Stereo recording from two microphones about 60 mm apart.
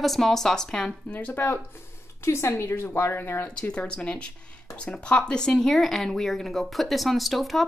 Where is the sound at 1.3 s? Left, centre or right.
Left.